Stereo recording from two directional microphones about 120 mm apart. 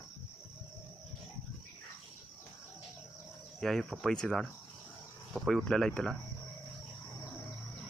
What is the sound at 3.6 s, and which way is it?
Speech, 5° left (ahead or behind).